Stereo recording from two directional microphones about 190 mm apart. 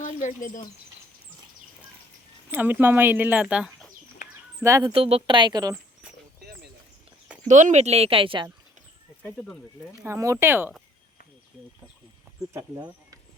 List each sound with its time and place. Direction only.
0.0 s speech: 40° left (ahead or behind)
2.5 s speech: 10° right (ahead or behind)
4.6 s speech: 15° right (ahead or behind)
4.9 s speech: 30° right (ahead or behind)
6.4 s a sound: 55° right (ahead or behind)
7.4 s speech: 40° right (ahead or behind)
10.0 s speech: 15° right (ahead or behind)
12.5 s speech: 20° right (ahead or behind)